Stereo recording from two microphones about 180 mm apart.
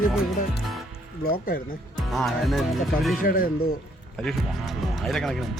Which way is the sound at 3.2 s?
55° left (ahead or behind).